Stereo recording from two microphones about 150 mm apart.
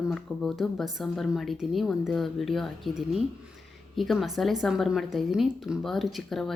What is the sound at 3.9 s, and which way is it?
A woman's voice, centre (ahead or behind).